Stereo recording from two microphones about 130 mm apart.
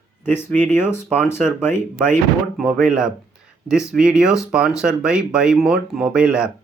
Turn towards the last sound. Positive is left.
turn(degrees=-5)  # may be behind; listen again after turning